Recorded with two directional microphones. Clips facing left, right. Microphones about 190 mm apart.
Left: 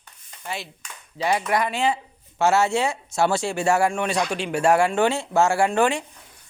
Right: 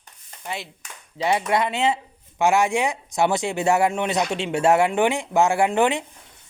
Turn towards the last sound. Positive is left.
turn(degrees=-20)  # may be behind; listen again after turning